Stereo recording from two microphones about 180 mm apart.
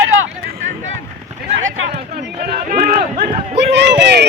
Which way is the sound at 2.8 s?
50° right (ahead or behind).